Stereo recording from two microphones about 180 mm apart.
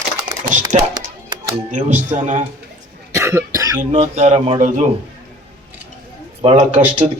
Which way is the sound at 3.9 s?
40° right (ahead or behind).